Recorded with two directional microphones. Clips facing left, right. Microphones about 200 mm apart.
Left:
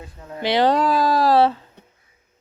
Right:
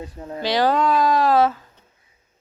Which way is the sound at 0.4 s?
25° left (ahead or behind).